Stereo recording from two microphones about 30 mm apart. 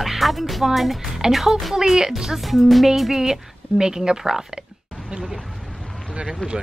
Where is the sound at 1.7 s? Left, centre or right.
Centre.